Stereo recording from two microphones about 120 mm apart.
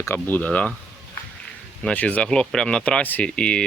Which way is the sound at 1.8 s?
10° left (ahead or behind).